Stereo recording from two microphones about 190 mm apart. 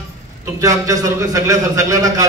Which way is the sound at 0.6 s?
15° right (ahead or behind).